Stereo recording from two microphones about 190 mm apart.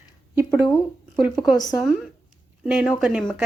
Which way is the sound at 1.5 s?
20° left (ahead or behind).